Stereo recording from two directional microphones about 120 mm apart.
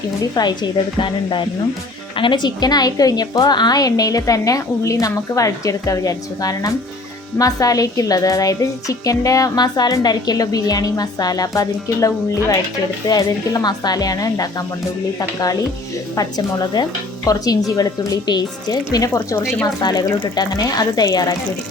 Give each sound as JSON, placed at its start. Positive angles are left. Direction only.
{"t": 0.2, "sound": "a woman's voice", "side_deg": 35}